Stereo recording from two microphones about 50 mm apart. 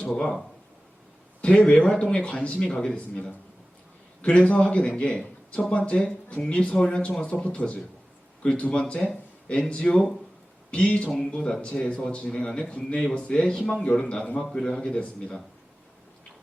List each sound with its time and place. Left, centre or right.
0.1 s speech: centre
1.4 s a man's voice: left
8.8 s speech: centre
14.1 s speech: left
14.3 s speech: centre